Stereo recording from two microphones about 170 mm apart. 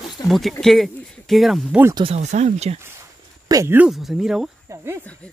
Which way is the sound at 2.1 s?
45° right (ahead or behind).